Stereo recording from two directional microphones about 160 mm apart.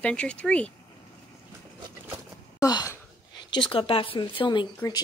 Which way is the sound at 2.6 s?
20° left (ahead or behind).